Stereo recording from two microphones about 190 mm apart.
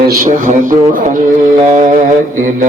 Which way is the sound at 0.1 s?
45° right (ahead or behind).